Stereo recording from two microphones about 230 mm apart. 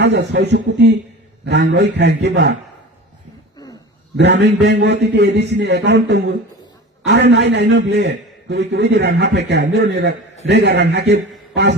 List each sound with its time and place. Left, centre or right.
0.0 s a man's voice: right
4.2 s a man's voice: right